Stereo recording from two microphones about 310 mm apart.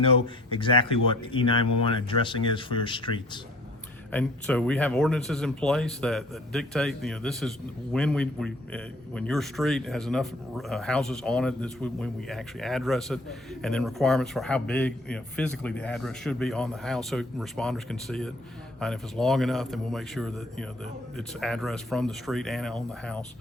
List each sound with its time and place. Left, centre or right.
0.5 s speech: centre
4.1 s a man's voice: centre